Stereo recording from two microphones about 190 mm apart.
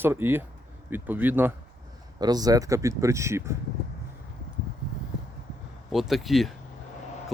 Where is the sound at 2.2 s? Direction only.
20° right (ahead or behind).